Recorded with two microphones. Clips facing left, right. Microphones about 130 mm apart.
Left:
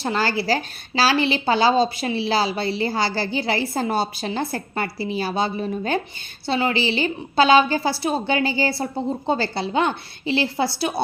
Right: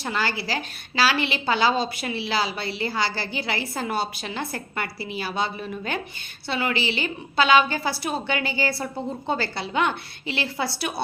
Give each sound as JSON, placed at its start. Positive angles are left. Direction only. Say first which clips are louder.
{"t": 0.0, "sound": "a woman's voice", "louder": "left 5 dB", "side_deg": 35}